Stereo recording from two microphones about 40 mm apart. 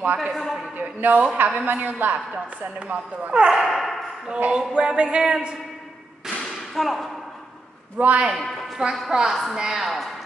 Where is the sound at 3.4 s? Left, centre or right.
Right.